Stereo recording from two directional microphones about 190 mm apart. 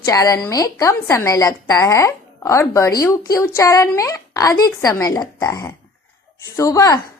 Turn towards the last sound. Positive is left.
turn(degrees=15)  # may be behind; listen again after turning